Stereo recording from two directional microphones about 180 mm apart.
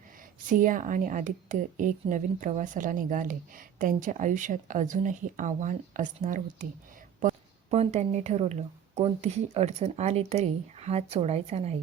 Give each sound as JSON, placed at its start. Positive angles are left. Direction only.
{"t": 0.4, "sound": "a woman's voice", "side_deg": -45}